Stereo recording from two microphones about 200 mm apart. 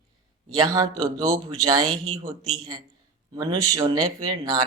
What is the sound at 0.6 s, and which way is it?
Speech, 20° right (ahead or behind).